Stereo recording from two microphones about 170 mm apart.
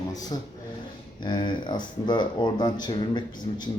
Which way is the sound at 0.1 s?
20° left (ahead or behind).